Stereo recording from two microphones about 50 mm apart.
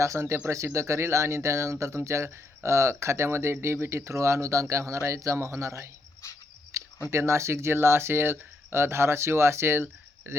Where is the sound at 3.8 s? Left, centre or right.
Right.